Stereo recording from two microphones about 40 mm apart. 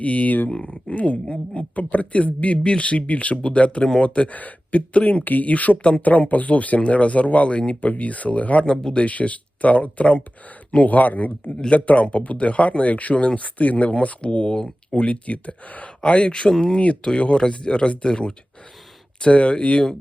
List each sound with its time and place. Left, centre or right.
0.0 s speech: left
0.5 s speech: left
8.6 s speech: centre
9.0 s speech: left
16.0 s speech: left